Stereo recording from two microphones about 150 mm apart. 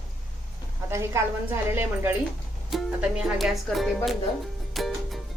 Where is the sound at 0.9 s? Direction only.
20° right (ahead or behind).